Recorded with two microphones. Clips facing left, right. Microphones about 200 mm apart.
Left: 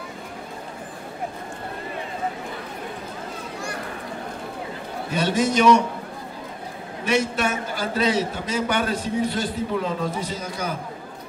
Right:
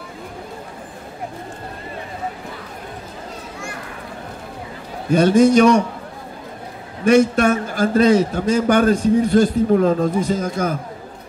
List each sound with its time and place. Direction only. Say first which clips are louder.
5.1 s a man's voice: right 10 dB; 45° right (ahead or behind)
7.1 s a man's voice: right 9 dB; 45° right (ahead or behind)